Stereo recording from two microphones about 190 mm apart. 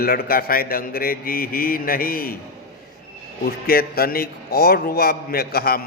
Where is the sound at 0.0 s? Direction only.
50° left (ahead or behind).